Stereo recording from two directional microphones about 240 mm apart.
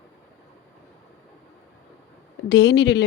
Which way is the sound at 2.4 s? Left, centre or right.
Left.